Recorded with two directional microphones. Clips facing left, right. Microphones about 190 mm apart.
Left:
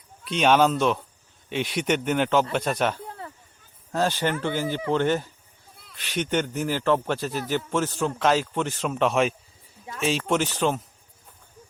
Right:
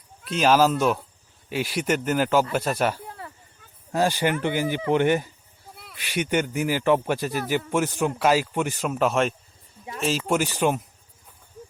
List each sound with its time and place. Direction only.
0.3 s speech: centre (ahead or behind)
5.7 s a sound: 70° right (ahead or behind)
6.0 s speech: 10° right (ahead or behind)